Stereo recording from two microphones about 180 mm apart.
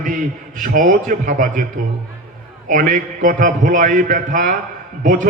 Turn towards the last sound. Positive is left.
turn(degrees=-45)  # may be behind; listen again after turning